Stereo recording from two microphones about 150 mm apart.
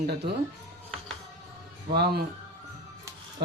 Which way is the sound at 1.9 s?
90° right.